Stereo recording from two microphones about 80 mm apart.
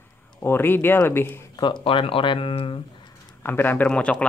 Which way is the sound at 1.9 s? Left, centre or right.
Left.